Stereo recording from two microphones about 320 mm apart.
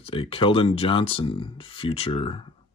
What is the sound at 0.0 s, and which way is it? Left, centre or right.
Speech, centre.